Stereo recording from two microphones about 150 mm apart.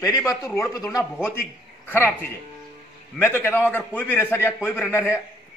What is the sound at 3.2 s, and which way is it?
A man's voice, 15° left (ahead or behind).